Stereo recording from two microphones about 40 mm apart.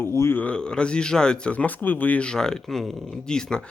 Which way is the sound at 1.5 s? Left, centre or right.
Left.